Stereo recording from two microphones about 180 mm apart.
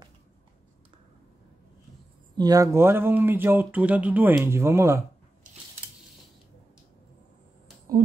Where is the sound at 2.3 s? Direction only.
20° right (ahead or behind).